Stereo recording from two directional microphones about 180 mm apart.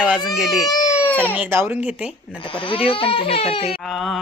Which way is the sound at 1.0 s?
10° left (ahead or behind).